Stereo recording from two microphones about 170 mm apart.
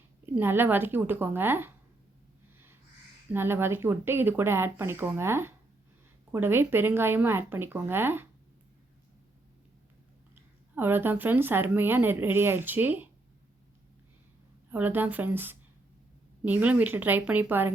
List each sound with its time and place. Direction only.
0.3 s speech: 10° right (ahead or behind)
3.3 s speech: 15° right (ahead or behind)
10.8 s speech: 10° right (ahead or behind)
14.7 s speech: 10° right (ahead or behind)